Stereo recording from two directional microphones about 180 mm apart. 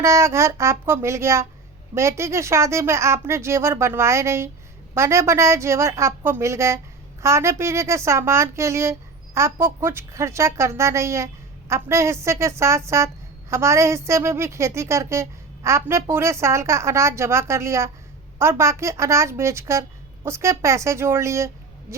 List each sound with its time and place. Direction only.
0.0 s a woman's voice: 15° right (ahead or behind)